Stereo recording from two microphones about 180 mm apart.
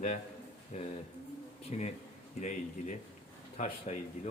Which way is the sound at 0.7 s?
40° left (ahead or behind).